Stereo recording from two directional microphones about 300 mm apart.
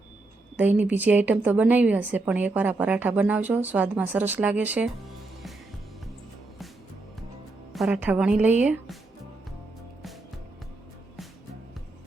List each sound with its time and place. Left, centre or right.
0.5 s a woman's voice: centre
7.7 s a woman's voice: centre